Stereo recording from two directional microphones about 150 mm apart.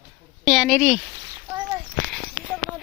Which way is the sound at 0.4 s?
Centre (ahead or behind).